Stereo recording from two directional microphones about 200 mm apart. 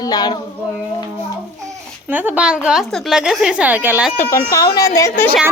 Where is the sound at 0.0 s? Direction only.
20° left (ahead or behind).